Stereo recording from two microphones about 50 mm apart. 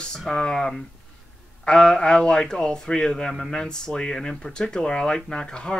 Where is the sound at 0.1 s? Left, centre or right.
Centre.